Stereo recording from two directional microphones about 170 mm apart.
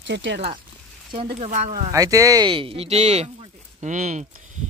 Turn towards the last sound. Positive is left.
turn(degrees=-45)  # may be behind; listen again after turning